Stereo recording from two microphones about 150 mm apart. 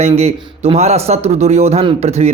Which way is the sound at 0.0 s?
45° right (ahead or behind).